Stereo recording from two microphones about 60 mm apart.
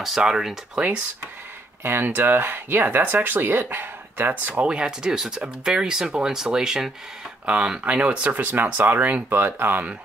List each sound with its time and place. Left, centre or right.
0.0 s speech: centre
0.7 s speech: right
1.8 s speech: right
5.0 s speech: centre; by 9.9 s right